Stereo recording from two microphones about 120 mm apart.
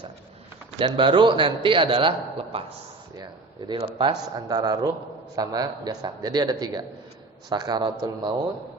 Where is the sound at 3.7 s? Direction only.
55° right (ahead or behind).